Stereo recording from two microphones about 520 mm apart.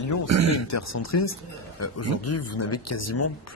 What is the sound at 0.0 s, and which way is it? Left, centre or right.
Speech, left.